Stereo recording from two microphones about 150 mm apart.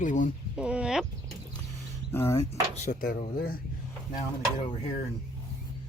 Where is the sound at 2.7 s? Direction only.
65° left (ahead or behind).